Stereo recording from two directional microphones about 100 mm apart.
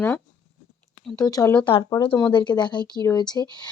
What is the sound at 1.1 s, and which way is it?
Speech, 35° left (ahead or behind).